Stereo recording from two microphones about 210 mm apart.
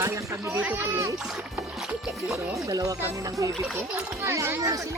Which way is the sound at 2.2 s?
Centre (ahead or behind).